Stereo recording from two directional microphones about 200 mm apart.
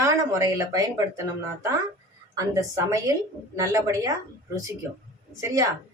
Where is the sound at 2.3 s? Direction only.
15° right (ahead or behind).